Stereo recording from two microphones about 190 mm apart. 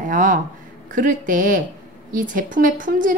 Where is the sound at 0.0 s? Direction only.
45° right (ahead or behind).